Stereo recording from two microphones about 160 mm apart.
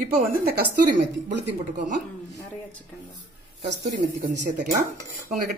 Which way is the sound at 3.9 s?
55° right (ahead or behind).